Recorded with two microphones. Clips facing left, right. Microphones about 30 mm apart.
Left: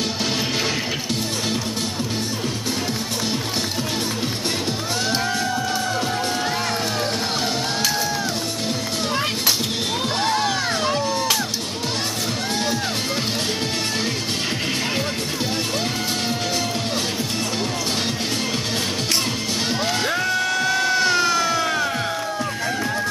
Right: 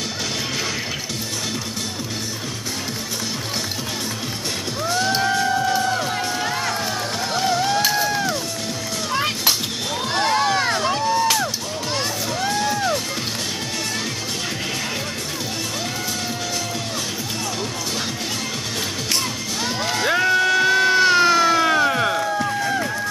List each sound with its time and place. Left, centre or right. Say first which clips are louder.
5.2 s music: right 3 dB; right
10.3 s music: right 3 dB; centre
10.8 s a sound: right 2 dB; centre
20.1 s music: right 4 dB; centre